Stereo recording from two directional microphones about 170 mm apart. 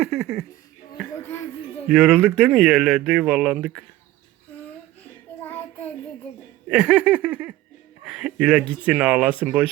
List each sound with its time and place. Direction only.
0.0 s speech: centre (ahead or behind)
1.2 s a sound: 15° left (ahead or behind)
1.9 s speech: 5° right (ahead or behind)
6.7 s speech: 5° right (ahead or behind)
8.0 s music: 5° right (ahead or behind)
8.9 s speech: 5° right (ahead or behind)